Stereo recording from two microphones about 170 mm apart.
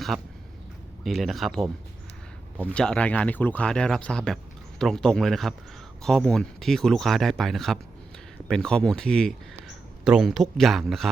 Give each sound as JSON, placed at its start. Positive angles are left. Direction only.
{"t": 0.1, "sound": "speech", "side_deg": 0}